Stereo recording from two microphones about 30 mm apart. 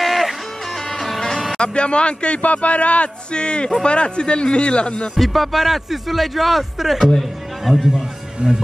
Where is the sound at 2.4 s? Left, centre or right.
Left.